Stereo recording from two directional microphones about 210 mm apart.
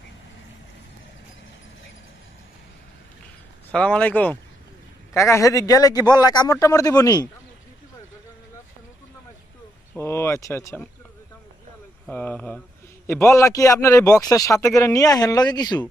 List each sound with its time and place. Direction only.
3.7 s a man's voice: 5° left (ahead or behind)
9.9 s a man's voice: 10° left (ahead or behind)
12.1 s a man's voice: 5° left (ahead or behind)